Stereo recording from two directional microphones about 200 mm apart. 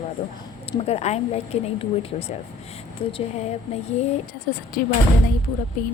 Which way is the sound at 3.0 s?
25° left (ahead or behind).